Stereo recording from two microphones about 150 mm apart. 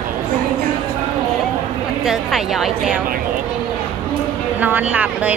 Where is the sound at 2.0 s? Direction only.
Centre (ahead or behind).